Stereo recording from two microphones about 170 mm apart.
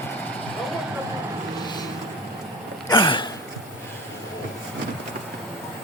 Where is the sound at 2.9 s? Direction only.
30° left (ahead or behind).